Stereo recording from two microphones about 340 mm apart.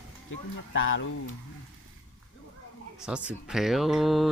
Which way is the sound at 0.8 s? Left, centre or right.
Left.